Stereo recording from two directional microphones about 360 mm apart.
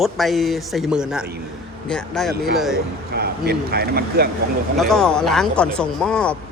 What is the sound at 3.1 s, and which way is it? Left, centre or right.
Speech, right.